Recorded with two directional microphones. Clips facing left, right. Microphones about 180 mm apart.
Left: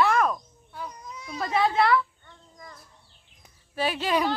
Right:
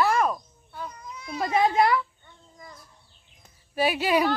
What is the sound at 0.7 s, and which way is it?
Speech, 10° left (ahead or behind).